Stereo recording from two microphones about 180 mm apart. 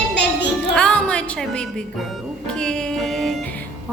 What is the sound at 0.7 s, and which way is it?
Speech, 5° left (ahead or behind).